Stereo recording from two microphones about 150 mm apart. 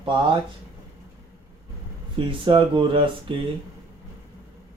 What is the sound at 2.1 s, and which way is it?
Speech, 35° right (ahead or behind).